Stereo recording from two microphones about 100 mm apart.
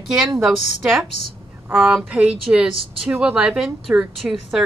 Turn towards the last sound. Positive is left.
turn(degrees=-5)  # may be behind; listen again after turning